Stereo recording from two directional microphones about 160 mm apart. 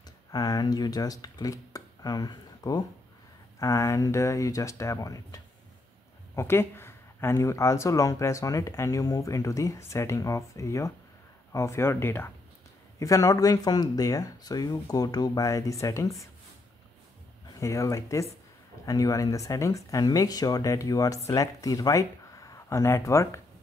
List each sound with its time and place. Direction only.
0.3 s speech: 25° left (ahead or behind)
17.6 s speech: 20° left (ahead or behind)